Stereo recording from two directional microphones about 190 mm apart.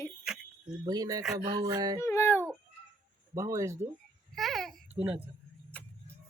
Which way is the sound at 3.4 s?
15° right (ahead or behind).